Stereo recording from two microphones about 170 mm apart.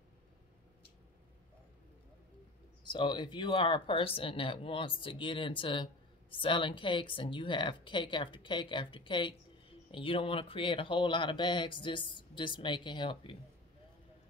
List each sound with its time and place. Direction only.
2.8 s speech: 25° left (ahead or behind)